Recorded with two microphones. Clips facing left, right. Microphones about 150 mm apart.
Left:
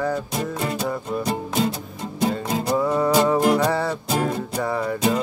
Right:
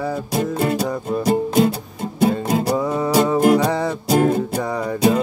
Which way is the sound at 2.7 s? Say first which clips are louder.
Left 2 dB; 10° right (ahead or behind).